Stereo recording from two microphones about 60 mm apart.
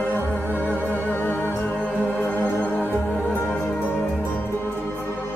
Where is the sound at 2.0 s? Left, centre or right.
Centre.